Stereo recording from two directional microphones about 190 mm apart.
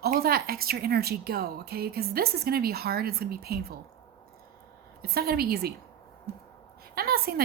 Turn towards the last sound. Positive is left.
turn(degrees=-55)  # may be behind; listen again after turning